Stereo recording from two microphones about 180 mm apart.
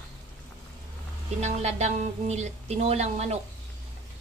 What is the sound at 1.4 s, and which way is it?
Speech, 40° right (ahead or behind).